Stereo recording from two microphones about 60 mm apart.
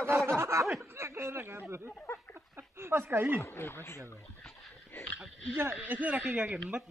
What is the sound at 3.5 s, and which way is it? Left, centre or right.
Speech, left.